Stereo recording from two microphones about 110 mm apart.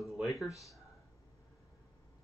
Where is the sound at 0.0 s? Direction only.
Centre (ahead or behind).